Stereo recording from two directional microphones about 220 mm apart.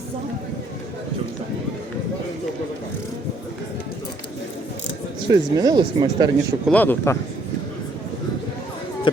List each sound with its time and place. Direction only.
5.3 s speech: 15° right (ahead or behind)
6.7 s speech: 10° left (ahead or behind)